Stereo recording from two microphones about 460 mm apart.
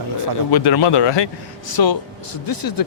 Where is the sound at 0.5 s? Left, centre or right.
Left.